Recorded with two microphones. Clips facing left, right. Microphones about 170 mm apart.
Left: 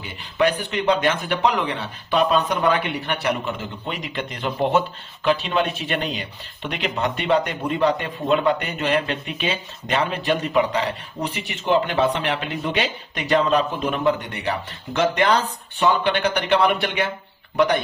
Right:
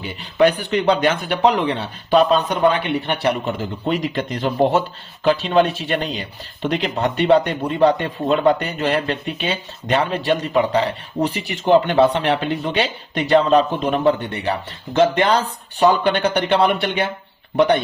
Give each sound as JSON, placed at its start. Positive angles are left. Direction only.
{"t": 0.2, "sound": "speech", "side_deg": -35}